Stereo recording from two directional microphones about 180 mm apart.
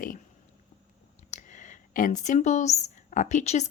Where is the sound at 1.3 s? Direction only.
45° left (ahead or behind).